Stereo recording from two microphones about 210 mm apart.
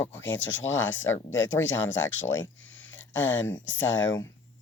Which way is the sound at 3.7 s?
65° left (ahead or behind).